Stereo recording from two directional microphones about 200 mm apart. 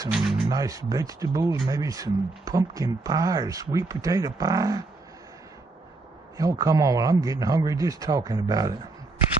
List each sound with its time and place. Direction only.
0.5 s speech: 15° right (ahead or behind)
6.3 s speech: 15° right (ahead or behind)